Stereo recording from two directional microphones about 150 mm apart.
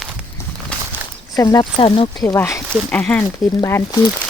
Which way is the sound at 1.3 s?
25° left (ahead or behind).